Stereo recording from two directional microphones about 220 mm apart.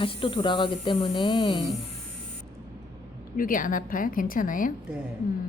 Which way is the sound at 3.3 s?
40° left (ahead or behind).